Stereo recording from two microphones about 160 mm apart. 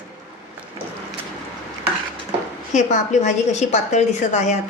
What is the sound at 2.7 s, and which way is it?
A woman's voice, 45° left (ahead or behind).